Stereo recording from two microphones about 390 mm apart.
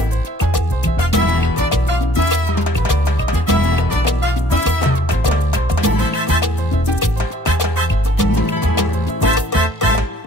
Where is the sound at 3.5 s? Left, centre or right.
Left.